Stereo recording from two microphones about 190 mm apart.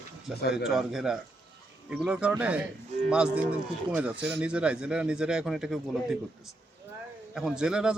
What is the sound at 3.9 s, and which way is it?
Speech, 5° right (ahead or behind).